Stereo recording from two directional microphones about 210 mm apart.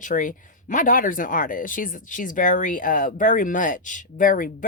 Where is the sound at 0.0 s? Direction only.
40° left (ahead or behind).